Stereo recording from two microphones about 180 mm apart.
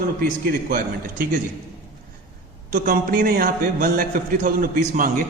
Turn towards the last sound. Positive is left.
turn(degrees=-50)  # may be behind; listen again after turning